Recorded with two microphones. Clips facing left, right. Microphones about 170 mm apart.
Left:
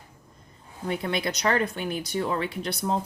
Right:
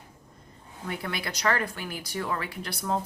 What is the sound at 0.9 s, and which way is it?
Speech, 20° left (ahead or behind).